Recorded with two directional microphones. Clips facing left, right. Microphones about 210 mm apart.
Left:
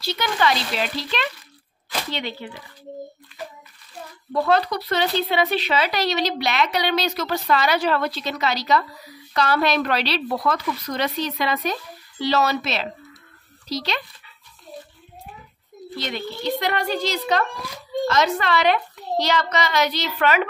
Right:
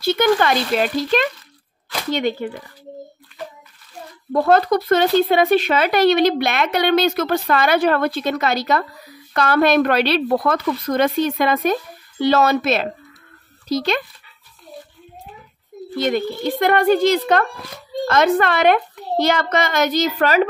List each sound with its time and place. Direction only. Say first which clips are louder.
0.0 s speech: right 7 dB; 50° right (ahead or behind)
4.3 s speech: right 5 dB; 50° right (ahead or behind)
16.0 s speech: right 9 dB; 50° right (ahead or behind)